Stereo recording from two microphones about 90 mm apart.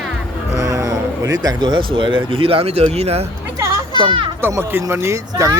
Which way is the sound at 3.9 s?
65° right (ahead or behind).